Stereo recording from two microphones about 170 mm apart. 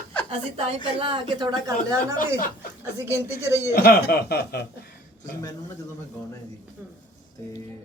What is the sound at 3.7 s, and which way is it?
Speech, 65° left (ahead or behind).